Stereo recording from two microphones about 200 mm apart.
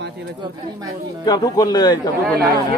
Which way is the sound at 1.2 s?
20° left (ahead or behind).